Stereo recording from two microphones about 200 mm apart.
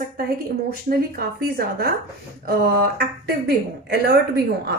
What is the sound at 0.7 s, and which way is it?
A woman's voice, 50° right (ahead or behind).